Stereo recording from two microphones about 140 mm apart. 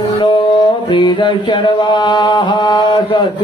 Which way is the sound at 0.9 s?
35° left (ahead or behind).